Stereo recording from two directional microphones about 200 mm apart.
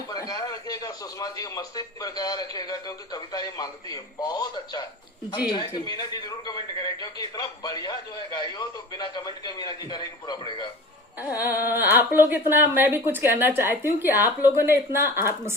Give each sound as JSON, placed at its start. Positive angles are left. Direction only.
{"t": 0.1, "sound": "a man's voice", "side_deg": 20}
{"t": 11.3, "sound": "a sound", "side_deg": 45}
{"t": 11.7, "sound": "a woman's voice", "side_deg": -10}